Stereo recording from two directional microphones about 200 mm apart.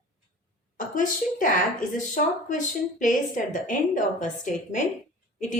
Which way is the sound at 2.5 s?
40° left (ahead or behind).